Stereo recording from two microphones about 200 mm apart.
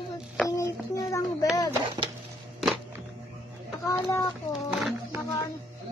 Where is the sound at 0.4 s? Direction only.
15° left (ahead or behind).